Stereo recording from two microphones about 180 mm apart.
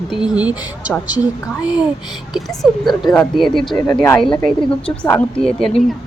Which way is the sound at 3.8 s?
15° left (ahead or behind).